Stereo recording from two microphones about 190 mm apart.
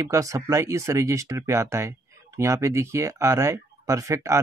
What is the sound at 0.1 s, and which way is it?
Speech, 15° right (ahead or behind).